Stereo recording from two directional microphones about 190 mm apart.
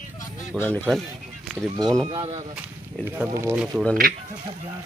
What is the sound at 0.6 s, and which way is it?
Speech, 5° left (ahead or behind).